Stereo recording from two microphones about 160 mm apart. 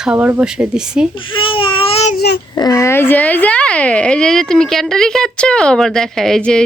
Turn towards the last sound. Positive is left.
turn(degrees=5)  # may be behind; listen again after turning